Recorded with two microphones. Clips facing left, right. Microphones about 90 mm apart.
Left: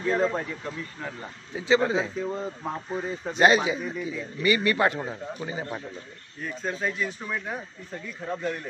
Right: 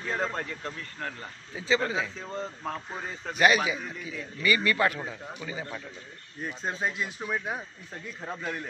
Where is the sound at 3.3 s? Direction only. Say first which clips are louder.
Left 3 dB; 30° left (ahead or behind).